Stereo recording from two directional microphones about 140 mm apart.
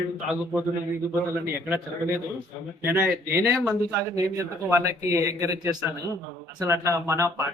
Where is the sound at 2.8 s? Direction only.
15° right (ahead or behind).